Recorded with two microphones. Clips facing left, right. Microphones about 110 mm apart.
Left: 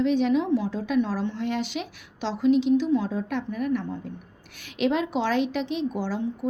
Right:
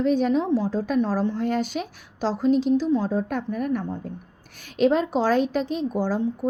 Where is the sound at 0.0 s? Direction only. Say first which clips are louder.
Right 1 dB; 45° right (ahead or behind).